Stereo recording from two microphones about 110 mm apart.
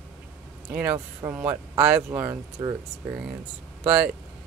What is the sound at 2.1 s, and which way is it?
Speech, 20° right (ahead or behind).